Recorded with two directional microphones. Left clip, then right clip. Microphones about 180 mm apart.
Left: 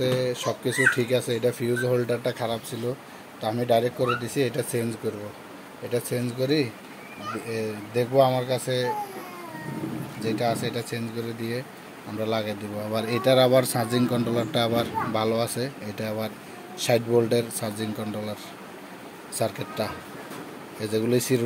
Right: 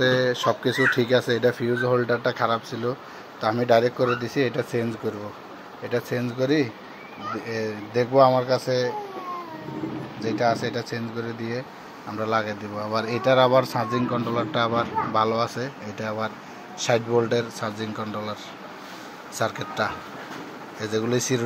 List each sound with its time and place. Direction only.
0.0 s speech: centre (ahead or behind)
3.3 s speech: 10° right (ahead or behind)
5.9 s speech: 5° left (ahead or behind)
10.2 s speech: centre (ahead or behind)
12.2 s speech: 15° left (ahead or behind)